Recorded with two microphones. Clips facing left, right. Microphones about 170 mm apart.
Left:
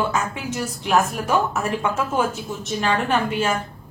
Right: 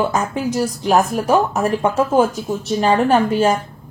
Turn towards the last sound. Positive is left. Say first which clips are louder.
# right 7 dB
turn(degrees=-40)  # may be behind; listen again after turning